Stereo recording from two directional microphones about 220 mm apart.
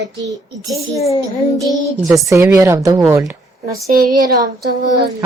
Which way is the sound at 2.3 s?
10° right (ahead or behind).